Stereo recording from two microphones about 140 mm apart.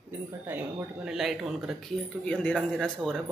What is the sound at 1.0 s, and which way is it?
Speech, 5° right (ahead or behind).